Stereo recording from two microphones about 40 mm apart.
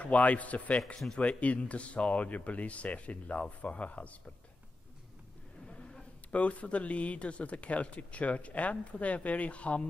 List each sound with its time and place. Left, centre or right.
0.0 s speech: left
6.3 s speech: left